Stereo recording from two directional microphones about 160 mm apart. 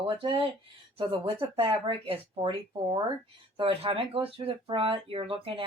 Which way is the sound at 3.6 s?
35° right (ahead or behind).